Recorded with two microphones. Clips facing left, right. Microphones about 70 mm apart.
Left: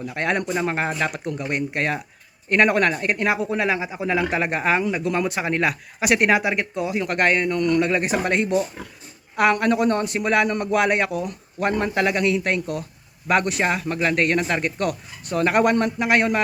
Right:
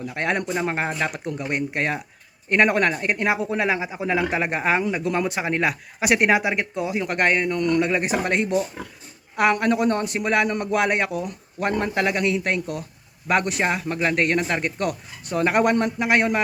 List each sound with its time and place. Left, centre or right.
0.1 s speech: centre
1.1 s speech: centre
5.4 s speech: centre
7.1 s speech: centre
7.6 s speech: centre
7.9 s speech: centre
11.6 s speech: centre
14.8 s speech: centre